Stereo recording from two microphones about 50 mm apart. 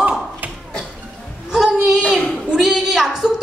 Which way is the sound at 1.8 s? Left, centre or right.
Centre.